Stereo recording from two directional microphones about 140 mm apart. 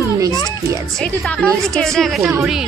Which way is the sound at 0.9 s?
5° left (ahead or behind).